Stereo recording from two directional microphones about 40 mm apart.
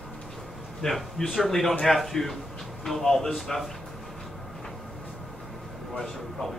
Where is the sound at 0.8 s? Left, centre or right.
Centre.